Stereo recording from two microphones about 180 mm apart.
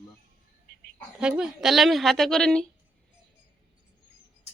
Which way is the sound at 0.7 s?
60° left (ahead or behind).